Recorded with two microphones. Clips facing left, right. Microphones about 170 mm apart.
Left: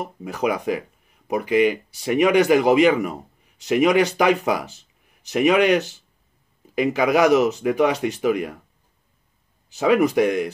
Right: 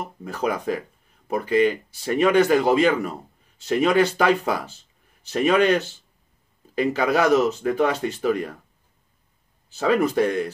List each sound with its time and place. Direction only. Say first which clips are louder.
0.2 s speech: left 2 dB; 15° left (ahead or behind)
9.7 s speech: left 3 dB; 15° left (ahead or behind)